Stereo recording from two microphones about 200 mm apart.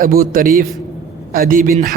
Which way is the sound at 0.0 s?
45° right (ahead or behind).